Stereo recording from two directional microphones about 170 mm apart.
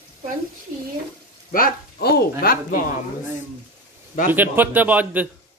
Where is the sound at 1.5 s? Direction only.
55° left (ahead or behind).